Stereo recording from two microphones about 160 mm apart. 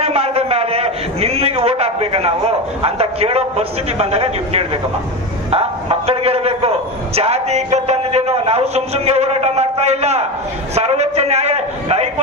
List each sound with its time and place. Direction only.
0.0 s a man's voice: 40° right (ahead or behind)